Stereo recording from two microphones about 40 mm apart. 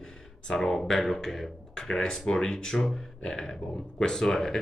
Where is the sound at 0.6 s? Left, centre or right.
Centre.